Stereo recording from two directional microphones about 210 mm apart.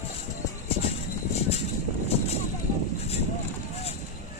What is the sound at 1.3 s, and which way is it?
Vehicle, 30° left (ahead or behind).